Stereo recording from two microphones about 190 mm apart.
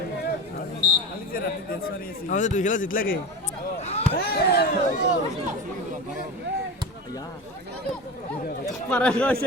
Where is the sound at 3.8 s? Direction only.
35° left (ahead or behind).